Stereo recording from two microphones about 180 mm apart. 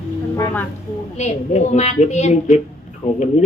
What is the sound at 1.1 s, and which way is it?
A man's voice, 40° left (ahead or behind).